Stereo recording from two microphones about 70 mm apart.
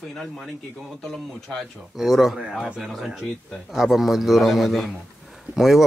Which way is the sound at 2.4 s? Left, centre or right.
Centre.